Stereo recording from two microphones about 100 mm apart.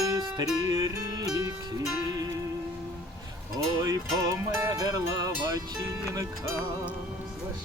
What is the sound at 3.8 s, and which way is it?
Music, 35° right (ahead or behind).